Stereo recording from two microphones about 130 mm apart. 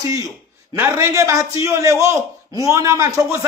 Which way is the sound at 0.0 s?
25° right (ahead or behind).